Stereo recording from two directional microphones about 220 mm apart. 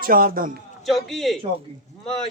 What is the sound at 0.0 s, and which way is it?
Speech, 40° right (ahead or behind).